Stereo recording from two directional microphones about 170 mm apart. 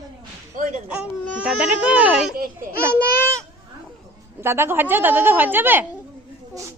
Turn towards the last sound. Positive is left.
turn(degrees=-10)  # may be behind; listen again after turning